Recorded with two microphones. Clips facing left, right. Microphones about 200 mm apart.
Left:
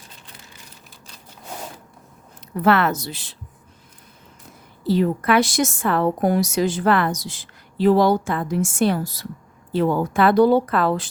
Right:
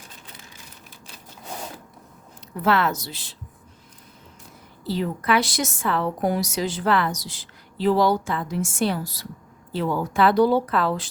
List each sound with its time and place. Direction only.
2.6 s a woman's voice: 55° left (ahead or behind)
4.9 s a woman's voice: 50° left (ahead or behind)